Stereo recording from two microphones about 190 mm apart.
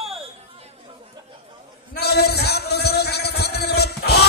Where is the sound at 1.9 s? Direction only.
60° left (ahead or behind).